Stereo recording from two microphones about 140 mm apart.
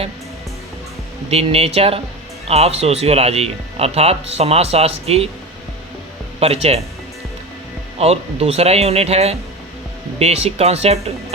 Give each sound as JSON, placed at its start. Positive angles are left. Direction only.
{"t": 1.3, "sound": "speech", "side_deg": -45}
{"t": 6.4, "sound": "speech", "side_deg": -45}
{"t": 7.9, "sound": "speech", "side_deg": -45}